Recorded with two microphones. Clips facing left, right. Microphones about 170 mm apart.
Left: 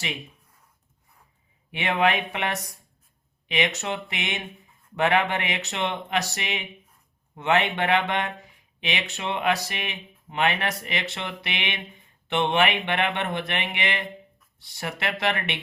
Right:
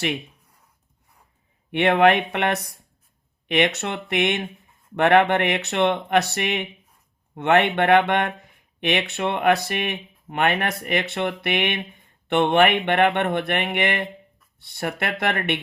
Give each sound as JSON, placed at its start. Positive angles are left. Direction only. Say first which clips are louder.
{"t": 1.7, "sound": "speech", "louder": "right 7 dB", "side_deg": -60}